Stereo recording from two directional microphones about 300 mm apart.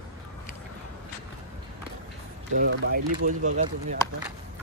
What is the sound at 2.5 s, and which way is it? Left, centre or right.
Speech, right.